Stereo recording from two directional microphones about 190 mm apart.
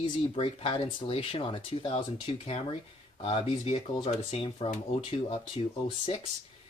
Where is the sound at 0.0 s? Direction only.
30° left (ahead or behind).